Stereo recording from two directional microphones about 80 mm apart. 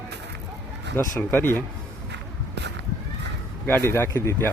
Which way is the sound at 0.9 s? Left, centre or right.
Left.